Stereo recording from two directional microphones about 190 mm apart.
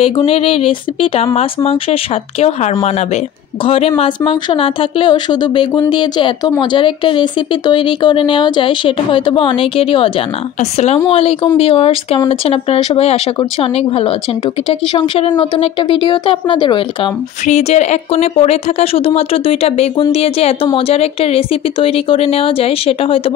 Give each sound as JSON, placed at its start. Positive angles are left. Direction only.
{"t": 0.0, "sound": "speech", "side_deg": 30}
{"t": 17.5, "sound": "speech", "side_deg": 35}